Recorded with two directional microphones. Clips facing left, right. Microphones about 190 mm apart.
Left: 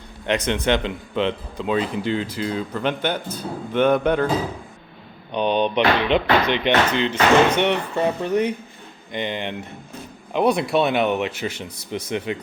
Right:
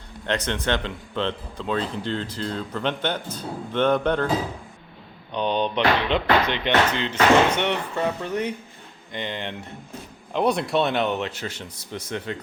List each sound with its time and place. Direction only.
0.3 s speech: 15° left (ahead or behind)
5.3 s speech: 15° left (ahead or behind)